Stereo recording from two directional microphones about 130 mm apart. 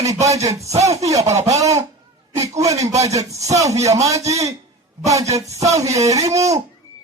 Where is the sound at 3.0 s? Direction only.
25° right (ahead or behind).